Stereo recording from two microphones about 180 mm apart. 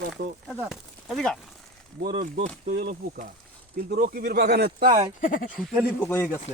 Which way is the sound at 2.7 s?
55° right (ahead or behind).